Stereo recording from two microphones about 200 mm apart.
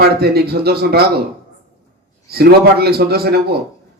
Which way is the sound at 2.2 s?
50° right (ahead or behind).